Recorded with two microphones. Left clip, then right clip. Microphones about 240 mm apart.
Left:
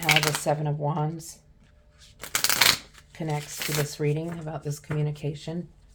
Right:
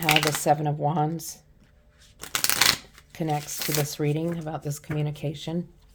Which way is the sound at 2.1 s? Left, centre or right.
Right.